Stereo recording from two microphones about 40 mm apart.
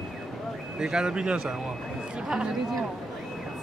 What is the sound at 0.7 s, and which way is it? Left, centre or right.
Speech, centre.